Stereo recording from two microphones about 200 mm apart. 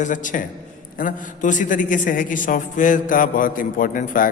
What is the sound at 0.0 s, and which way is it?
A man's voice, 40° left (ahead or behind).